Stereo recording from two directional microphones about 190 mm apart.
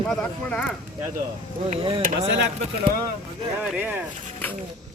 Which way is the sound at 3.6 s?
5° right (ahead or behind).